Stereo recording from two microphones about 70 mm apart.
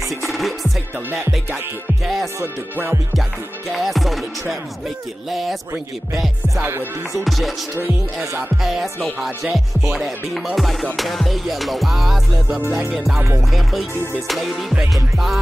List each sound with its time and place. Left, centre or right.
0.2 s music: centre
2.4 s music: right
3.7 s music: centre
7.2 s music: centre
8.6 s music: centre